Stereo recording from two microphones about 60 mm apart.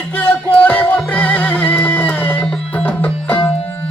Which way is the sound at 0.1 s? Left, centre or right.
Left.